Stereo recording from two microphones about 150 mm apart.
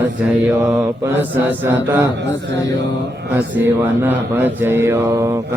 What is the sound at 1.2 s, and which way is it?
Mantra, 10° right (ahead or behind).